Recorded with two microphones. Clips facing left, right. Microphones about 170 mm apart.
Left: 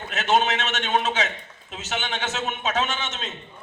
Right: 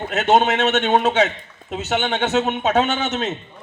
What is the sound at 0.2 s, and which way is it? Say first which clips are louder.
A man's voice: right 6 dB; 60° right (ahead or behind).